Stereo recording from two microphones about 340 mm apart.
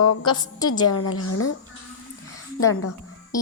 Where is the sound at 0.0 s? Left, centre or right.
Left.